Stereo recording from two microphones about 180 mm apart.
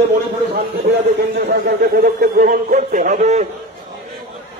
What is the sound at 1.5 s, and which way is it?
A man's voice, 60° right (ahead or behind).